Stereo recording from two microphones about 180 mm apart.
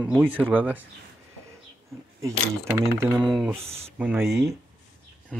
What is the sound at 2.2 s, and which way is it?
Speech, 15° right (ahead or behind).